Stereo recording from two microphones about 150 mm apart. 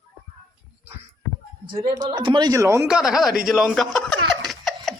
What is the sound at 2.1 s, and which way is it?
Speech, 30° right (ahead or behind).